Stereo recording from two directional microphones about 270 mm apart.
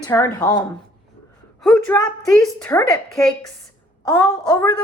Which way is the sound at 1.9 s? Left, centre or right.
Centre.